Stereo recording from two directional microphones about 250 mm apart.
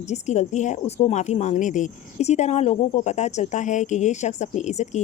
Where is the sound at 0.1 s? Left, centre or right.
Left.